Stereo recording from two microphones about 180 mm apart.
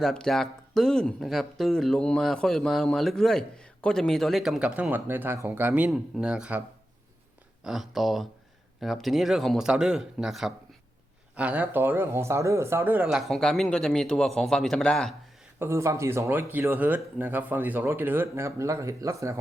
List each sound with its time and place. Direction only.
0.0 s speech: 5° left (ahead or behind)
7.6 s speech: centre (ahead or behind)
15.5 s speech: 15° right (ahead or behind)